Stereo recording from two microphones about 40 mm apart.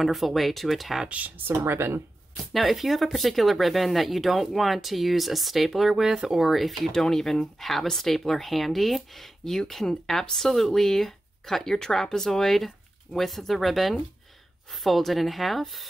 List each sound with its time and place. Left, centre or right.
0.0 s speech: centre
1.0 s speech: right
1.6 s speech: right
2.5 s speech: centre